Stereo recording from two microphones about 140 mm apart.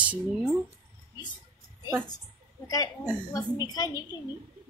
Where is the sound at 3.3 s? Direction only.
25° left (ahead or behind).